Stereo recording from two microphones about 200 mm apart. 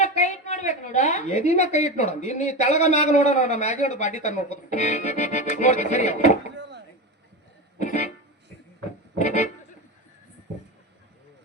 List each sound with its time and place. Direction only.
0.0 s a woman's voice: 35° left (ahead or behind)
6.5 s a sound: 60° right (ahead or behind)
7.8 s music: 35° left (ahead or behind)
9.1 s a woman's voice: 35° left (ahead or behind)